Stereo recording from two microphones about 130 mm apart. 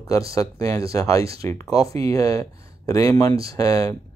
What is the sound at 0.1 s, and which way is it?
Speech, 25° left (ahead or behind).